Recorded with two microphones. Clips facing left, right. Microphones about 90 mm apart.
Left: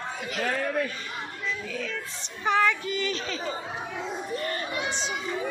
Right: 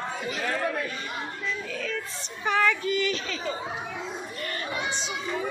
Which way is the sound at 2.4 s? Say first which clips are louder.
Even; 20° left (ahead or behind).